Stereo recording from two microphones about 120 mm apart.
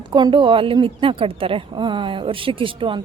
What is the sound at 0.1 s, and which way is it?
A woman's voice, 40° right (ahead or behind).